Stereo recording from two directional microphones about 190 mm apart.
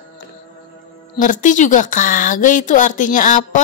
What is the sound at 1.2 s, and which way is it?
A woman's voice, 45° left (ahead or behind).